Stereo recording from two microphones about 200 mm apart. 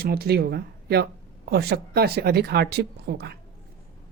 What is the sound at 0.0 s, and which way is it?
Speech, 50° right (ahead or behind).